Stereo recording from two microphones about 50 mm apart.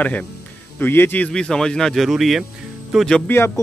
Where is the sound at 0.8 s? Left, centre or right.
Left.